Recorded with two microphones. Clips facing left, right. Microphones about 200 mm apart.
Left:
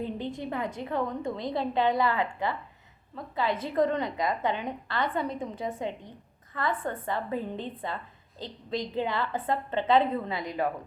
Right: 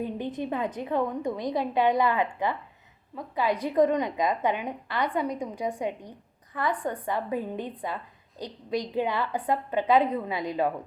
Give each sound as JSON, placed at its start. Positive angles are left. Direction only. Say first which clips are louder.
{"t": 0.0, "sound": "a woman's voice", "louder": "right 2 dB", "side_deg": -20}